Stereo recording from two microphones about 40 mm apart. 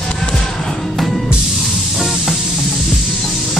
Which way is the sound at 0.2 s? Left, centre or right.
Centre.